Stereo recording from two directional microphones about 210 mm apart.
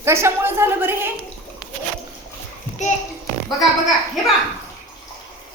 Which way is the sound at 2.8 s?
35° left (ahead or behind).